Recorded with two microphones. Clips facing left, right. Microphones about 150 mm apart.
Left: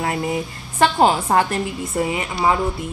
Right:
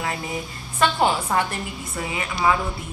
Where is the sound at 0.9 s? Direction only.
45° left (ahead or behind).